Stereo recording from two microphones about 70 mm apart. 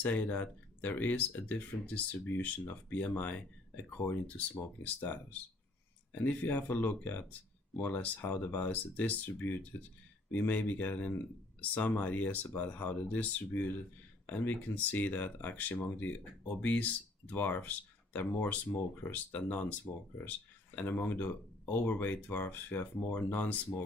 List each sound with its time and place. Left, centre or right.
0.0 s speech: left